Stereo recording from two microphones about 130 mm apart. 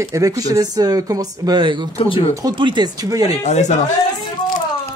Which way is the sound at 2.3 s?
35° right (ahead or behind).